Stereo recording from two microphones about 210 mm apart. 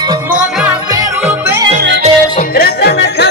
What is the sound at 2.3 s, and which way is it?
Music, 45° left (ahead or behind).